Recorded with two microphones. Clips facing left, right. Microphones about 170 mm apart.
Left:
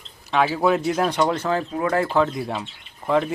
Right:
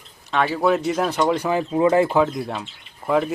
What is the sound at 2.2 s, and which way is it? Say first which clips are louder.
Speech: right 1 dB; centre (ahead or behind).